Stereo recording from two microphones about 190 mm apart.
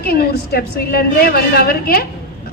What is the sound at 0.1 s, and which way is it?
A man's voice, 50° left (ahead or behind).